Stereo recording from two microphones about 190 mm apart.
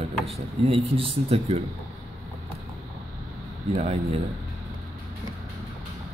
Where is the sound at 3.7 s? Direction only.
30° right (ahead or behind).